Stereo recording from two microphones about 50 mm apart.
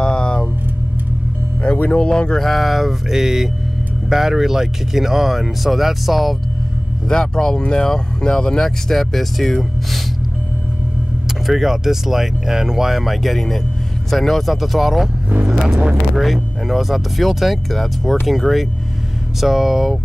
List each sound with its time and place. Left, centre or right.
0.0 s a sound: centre
1.6 s music: left
2.0 s speech: centre
2.3 s speech: centre
7.1 s speech: centre
11.4 s speech: centre